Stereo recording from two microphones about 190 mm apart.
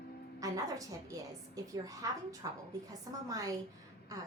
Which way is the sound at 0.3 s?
20° right (ahead or behind).